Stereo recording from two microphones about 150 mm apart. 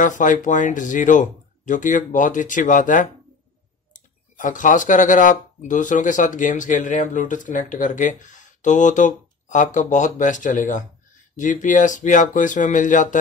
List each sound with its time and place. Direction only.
0.0 s speech: 60° left (ahead or behind)